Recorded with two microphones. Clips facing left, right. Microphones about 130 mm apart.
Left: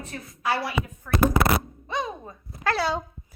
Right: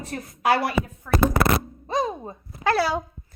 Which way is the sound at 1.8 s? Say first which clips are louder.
Right 5 dB; 35° right (ahead or behind).